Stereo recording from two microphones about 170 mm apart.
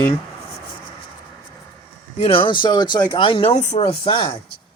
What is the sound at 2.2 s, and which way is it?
Speech, 30° left (ahead or behind).